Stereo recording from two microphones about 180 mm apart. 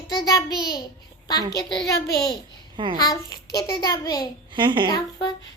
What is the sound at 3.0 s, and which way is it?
A child's voice, 20° left (ahead or behind).